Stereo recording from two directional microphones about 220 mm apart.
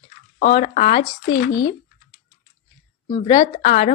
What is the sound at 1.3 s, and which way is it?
Speech, 55° left (ahead or behind).